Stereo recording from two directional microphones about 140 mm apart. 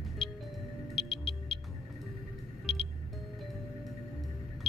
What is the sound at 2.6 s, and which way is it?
Music, 40° left (ahead or behind).